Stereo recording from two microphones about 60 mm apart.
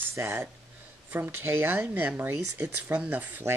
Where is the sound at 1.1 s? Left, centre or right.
Right.